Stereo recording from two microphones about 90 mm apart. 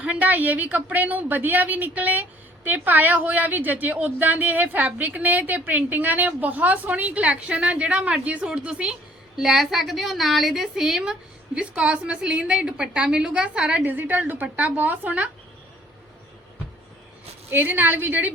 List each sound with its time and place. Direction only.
0.0 s a woman's voice: 15° right (ahead or behind)
17.5 s a woman's voice: 20° right (ahead or behind)